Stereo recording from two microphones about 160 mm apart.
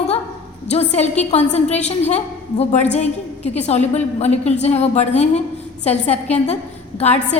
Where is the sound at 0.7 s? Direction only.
45° left (ahead or behind).